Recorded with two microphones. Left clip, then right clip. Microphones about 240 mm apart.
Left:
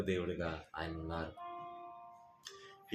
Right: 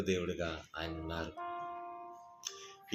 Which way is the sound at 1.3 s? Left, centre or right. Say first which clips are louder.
Right 5 dB; right.